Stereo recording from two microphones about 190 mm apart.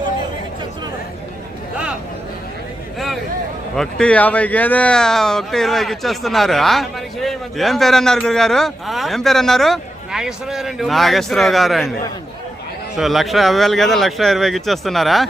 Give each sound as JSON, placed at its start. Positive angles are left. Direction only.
{"t": 3.8, "sound": "speech", "side_deg": 5}
{"t": 13.0, "sound": "speech", "side_deg": 0}